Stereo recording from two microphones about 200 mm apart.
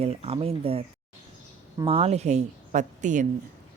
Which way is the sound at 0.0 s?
30° right (ahead or behind).